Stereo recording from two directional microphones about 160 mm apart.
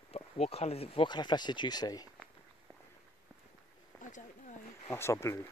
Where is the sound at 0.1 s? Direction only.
40° left (ahead or behind); by 2.0 s 25° left (ahead or behind).